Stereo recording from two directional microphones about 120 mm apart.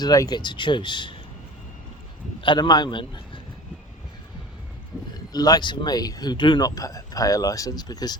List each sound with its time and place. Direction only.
0.0 s speech: 35° left (ahead or behind)
2.4 s a man's voice: 40° left (ahead or behind)
5.1 s speech: 35° left (ahead or behind)